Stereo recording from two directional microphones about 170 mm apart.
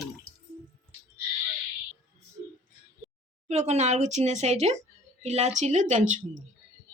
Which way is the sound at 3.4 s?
40° right (ahead or behind).